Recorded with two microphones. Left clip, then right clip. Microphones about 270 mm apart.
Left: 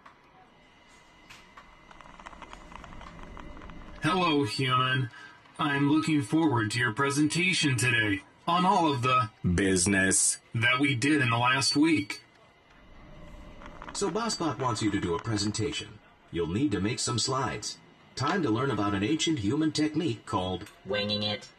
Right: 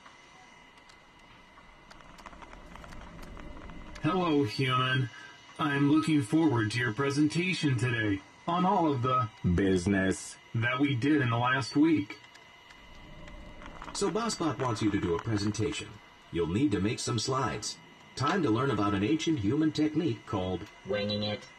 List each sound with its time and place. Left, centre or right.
4.0 s speech: left
4.5 s speech: centre; by 12.2 s left
13.7 s a sound: centre
14.7 s speech: centre